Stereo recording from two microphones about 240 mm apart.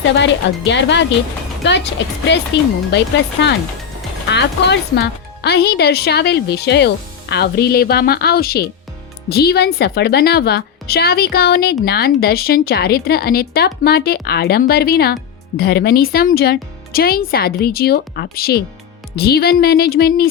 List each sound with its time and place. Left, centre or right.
0.7 s a woman's voice: left